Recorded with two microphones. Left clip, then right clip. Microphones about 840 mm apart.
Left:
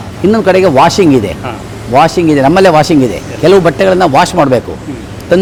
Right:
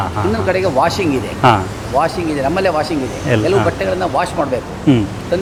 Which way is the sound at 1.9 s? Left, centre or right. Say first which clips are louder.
Left 9 dB; left.